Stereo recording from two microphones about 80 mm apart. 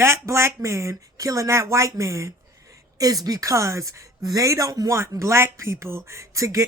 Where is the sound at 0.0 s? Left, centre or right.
Right.